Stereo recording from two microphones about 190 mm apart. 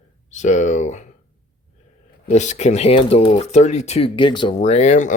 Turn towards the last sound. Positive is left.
turn(degrees=40)  # may be behind; listen again after turning